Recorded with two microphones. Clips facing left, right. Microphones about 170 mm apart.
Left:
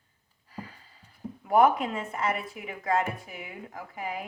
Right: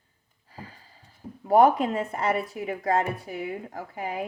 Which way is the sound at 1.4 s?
35° right (ahead or behind).